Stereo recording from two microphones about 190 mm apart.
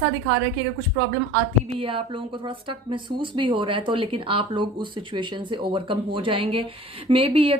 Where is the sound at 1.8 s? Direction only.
30° right (ahead or behind).